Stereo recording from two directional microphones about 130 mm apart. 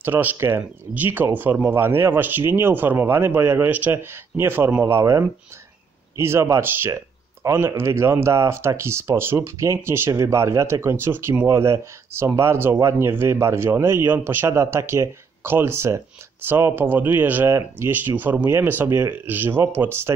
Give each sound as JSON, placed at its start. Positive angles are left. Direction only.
{"t": 0.0, "sound": "speech", "side_deg": -15}